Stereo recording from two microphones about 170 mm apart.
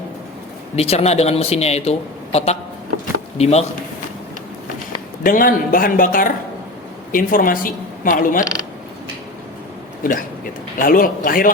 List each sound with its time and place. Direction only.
0.8 s speech: 40° left (ahead or behind)
5.2 s a woman's voice: 55° left (ahead or behind)
10.0 s speech: 55° left (ahead or behind)